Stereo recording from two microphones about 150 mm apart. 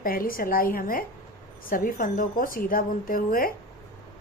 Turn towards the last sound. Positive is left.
turn(degrees=70)  # may be behind; listen again after turning